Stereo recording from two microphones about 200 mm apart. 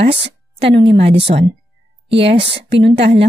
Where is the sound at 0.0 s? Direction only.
25° right (ahead or behind).